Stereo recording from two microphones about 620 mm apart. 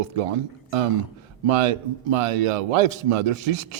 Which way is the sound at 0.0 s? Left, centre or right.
Right.